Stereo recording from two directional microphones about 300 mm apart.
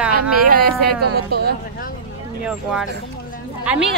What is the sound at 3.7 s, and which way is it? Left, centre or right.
Speech, centre.